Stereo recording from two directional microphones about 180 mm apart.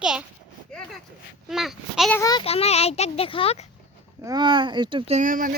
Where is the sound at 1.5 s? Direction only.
Centre (ahead or behind).